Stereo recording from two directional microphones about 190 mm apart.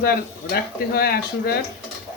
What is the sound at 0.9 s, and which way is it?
Speech, 55° left (ahead or behind).